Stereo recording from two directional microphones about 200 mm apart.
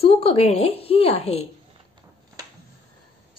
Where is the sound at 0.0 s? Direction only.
30° left (ahead or behind).